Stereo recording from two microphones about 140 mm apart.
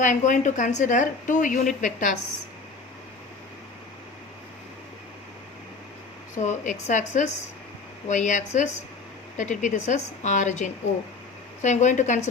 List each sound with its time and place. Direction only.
0.0 s a woman's voice: 65° left (ahead or behind)
6.3 s a woman's voice: 60° left (ahead or behind)